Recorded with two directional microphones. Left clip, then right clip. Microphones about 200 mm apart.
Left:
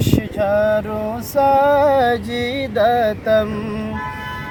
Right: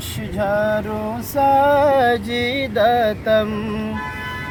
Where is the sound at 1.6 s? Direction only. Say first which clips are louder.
Left 1 dB; centre (ahead or behind).